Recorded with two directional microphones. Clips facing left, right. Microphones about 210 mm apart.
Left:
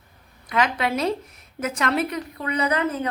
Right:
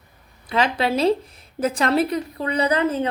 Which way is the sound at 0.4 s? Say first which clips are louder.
Right 2 dB; 30° right (ahead or behind).